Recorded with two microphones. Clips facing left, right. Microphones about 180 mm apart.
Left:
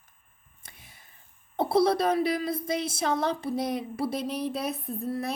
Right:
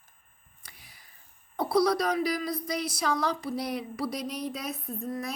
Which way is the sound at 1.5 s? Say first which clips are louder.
Left 2 dB; 25° left (ahead or behind).